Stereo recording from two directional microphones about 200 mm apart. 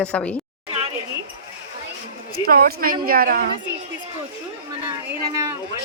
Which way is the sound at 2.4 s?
45° right (ahead or behind).